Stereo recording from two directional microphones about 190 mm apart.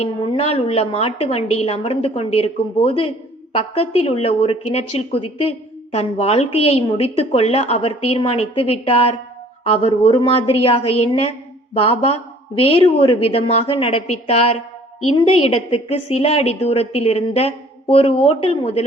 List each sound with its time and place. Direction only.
0.0 s a woman's voice: 35° left (ahead or behind)